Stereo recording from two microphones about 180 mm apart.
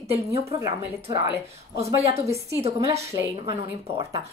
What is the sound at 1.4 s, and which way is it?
Speech, 35° right (ahead or behind).